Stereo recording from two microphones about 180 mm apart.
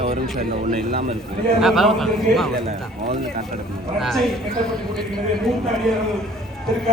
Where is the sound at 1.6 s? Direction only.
Centre (ahead or behind).